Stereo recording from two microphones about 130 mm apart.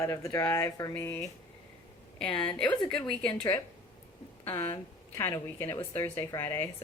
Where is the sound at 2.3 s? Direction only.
40° left (ahead or behind).